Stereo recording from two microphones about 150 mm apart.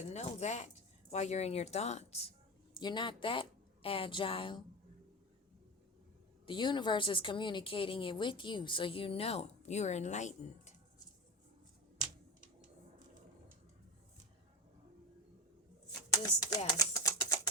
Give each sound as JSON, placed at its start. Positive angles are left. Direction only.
{"t": 0.1, "sound": "speech", "side_deg": 50}
{"t": 2.7, "sound": "a woman's voice", "side_deg": 30}
{"t": 6.4, "sound": "a woman's voice", "side_deg": 30}
{"t": 16.1, "sound": "speech", "side_deg": 25}
{"t": 16.7, "sound": "typing", "side_deg": 20}